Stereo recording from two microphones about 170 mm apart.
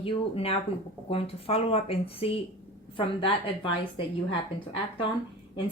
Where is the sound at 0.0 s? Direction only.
35° left (ahead or behind).